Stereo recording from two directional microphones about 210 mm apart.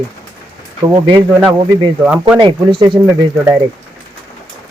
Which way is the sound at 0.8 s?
20° right (ahead or behind).